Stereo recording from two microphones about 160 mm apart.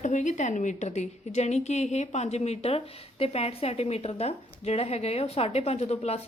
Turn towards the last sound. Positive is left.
turn(degrees=40)  # may be behind; listen again after turning